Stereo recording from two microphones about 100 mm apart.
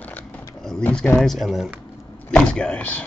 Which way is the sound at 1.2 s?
Centre (ahead or behind).